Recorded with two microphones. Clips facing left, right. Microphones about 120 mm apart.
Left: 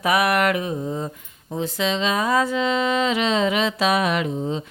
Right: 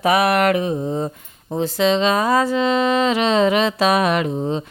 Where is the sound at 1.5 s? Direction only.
35° right (ahead or behind).